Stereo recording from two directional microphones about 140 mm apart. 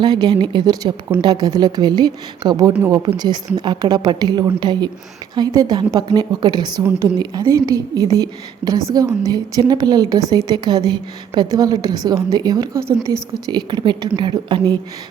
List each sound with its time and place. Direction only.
0.0 s a woman's voice: 30° right (ahead or behind)